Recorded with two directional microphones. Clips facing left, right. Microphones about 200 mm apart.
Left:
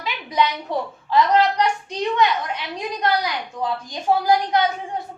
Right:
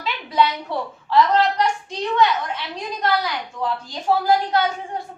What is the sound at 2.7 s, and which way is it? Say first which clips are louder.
A woman's voice: left 1 dB; 15° left (ahead or behind).